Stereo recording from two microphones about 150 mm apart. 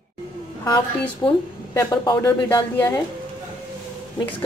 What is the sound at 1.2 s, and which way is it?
A woman's voice, 25° left (ahead or behind).